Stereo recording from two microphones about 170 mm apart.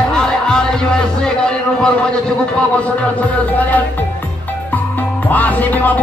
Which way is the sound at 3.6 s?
10° left (ahead or behind).